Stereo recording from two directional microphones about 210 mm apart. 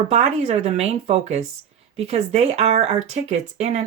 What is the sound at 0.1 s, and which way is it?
Speech, 30° right (ahead or behind).